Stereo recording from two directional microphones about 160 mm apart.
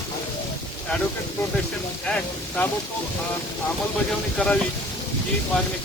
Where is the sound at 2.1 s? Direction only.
5° left (ahead or behind).